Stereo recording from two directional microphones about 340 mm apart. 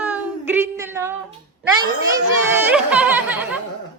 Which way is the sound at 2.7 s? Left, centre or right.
Centre.